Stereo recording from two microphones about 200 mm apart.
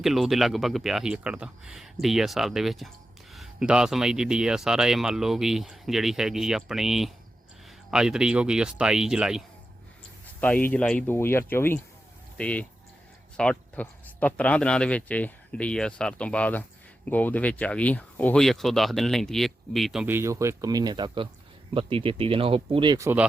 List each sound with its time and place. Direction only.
0.0 s speech: centre (ahead or behind)
10.4 s speech: 10° left (ahead or behind); by 23.2 s 15° right (ahead or behind)